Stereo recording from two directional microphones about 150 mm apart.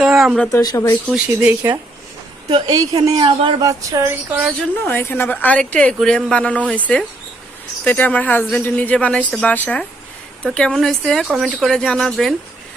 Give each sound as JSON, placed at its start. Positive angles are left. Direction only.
{"t": 0.0, "sound": "a sound", "side_deg": 0}
{"t": 0.6, "sound": "speech", "side_deg": 25}
{"t": 1.0, "sound": "speech", "side_deg": -5}
{"t": 2.5, "sound": "a woman's voice", "side_deg": -30}
{"t": 3.6, "sound": "a sound", "side_deg": -20}
{"t": 4.8, "sound": "speech", "side_deg": 15}